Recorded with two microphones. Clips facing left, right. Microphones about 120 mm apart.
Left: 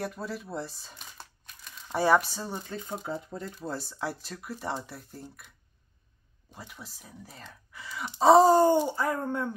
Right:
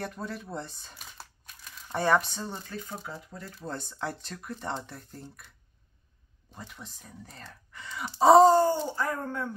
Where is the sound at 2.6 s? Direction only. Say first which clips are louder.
Left 4 dB; 20° left (ahead or behind).